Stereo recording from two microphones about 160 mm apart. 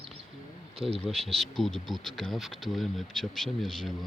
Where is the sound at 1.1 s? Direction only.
Centre (ahead or behind).